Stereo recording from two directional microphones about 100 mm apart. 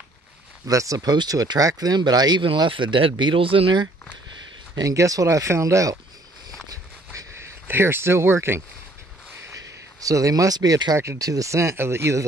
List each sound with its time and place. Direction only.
0.7 s speech: 35° right (ahead or behind)
2.4 s speech: 55° right (ahead or behind)
4.7 s speech: 35° right (ahead or behind)
6.7 s a sound: 35° right (ahead or behind)
7.6 s speech: 20° right (ahead or behind)
9.9 s speech: 35° right (ahead or behind)